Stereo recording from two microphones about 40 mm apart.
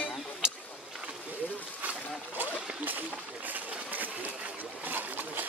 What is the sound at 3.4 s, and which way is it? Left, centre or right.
Sewing machine, right.